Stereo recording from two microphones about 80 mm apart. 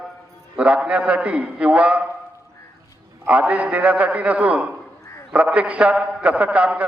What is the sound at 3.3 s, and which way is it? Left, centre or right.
A man's voice, centre.